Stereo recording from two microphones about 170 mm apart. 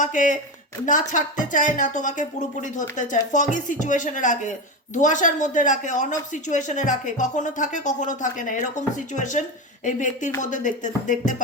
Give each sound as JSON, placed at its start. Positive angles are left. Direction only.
{"t": 0.0, "sound": "speech", "side_deg": 50}